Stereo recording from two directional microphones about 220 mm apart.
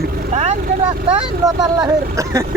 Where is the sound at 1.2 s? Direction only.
15° right (ahead or behind).